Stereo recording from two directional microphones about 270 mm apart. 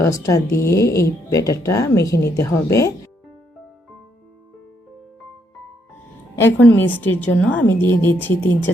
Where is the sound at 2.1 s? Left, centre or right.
Left.